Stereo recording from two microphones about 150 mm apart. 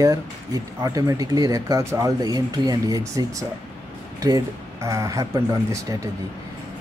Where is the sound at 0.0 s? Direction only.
25° right (ahead or behind).